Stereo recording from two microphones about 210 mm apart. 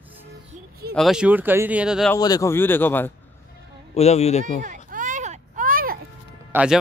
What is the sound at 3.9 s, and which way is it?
Speech, 30° left (ahead or behind).